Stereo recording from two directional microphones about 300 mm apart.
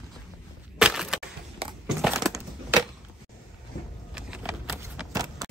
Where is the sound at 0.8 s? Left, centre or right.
Centre.